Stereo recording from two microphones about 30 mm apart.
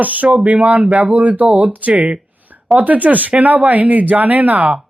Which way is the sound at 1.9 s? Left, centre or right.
Right.